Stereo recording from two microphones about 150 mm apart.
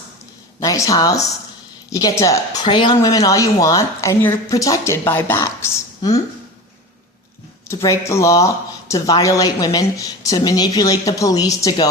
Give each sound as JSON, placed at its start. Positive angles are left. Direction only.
{"t": 0.6, "sound": "speech", "side_deg": 20}
{"t": 7.7, "sound": "speech", "side_deg": 20}